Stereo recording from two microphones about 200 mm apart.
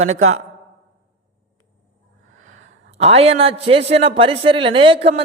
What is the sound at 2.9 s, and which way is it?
A man's voice, 30° right (ahead or behind).